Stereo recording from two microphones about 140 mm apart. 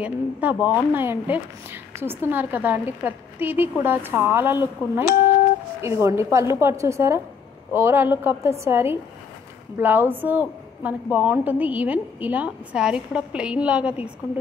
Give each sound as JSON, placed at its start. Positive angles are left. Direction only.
{"t": 0.0, "sound": "a woman's voice", "side_deg": -10}